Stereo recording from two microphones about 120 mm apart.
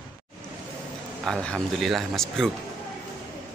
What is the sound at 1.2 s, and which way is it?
Speech, 5° left (ahead or behind).